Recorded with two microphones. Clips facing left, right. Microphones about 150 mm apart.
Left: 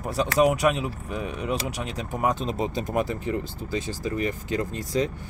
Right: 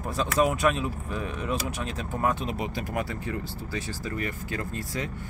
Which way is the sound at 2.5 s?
30° left (ahead or behind).